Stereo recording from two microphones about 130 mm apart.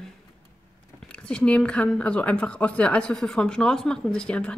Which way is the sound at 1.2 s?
10° left (ahead or behind).